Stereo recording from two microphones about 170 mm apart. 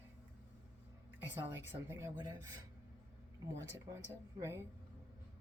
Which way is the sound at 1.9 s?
20° right (ahead or behind).